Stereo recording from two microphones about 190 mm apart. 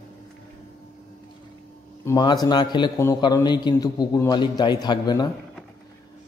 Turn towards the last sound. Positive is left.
turn(degrees=20)  # may be behind; listen again after turning